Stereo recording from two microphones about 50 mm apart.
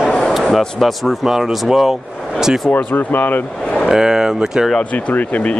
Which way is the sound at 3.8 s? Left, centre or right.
Centre.